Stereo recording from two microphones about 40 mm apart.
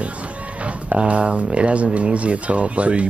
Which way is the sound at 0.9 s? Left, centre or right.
Right.